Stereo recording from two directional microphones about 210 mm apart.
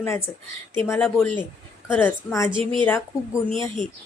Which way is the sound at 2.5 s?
25° right (ahead or behind).